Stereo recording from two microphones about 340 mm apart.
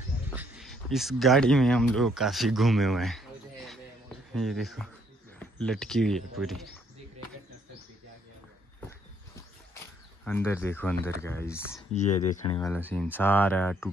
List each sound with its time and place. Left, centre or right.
0.3 s speech: centre
10.2 s speech: centre
11.9 s speech: left; by 13.8 s centre